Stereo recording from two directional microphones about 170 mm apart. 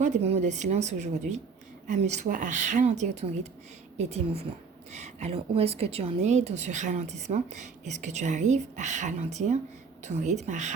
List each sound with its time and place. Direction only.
0.0 s a woman's voice: 40° right (ahead or behind)